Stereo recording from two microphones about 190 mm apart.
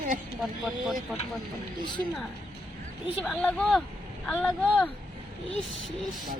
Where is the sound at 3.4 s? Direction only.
5° left (ahead or behind).